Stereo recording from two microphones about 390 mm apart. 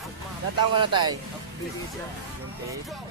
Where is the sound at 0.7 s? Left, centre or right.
Centre.